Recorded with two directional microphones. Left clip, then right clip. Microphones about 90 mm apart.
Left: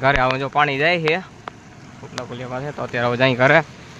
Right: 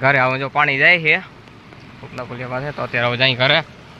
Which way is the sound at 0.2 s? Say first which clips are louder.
Right 1 dB; 25° left (ahead or behind).